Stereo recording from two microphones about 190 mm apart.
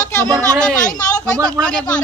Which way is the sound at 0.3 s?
20° right (ahead or behind).